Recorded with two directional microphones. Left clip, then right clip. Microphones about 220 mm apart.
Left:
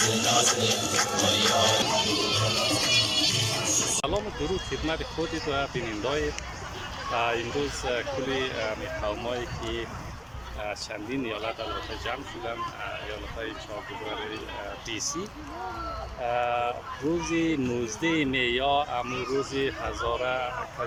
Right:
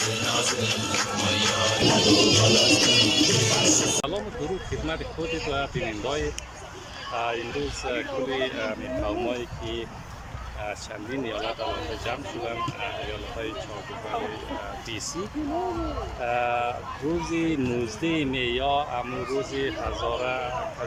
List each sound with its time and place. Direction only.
0.0 s music: 30° left (ahead or behind)
1.9 s music: 45° right (ahead or behind)
5.5 s speech: centre (ahead or behind)
7.9 s speech: centre (ahead or behind)
16.2 s speech: centre (ahead or behind)